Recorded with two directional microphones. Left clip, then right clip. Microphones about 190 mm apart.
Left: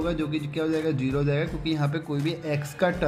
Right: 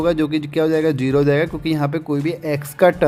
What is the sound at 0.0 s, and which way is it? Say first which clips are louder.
Speech: right 10 dB; 60° right (ahead or behind).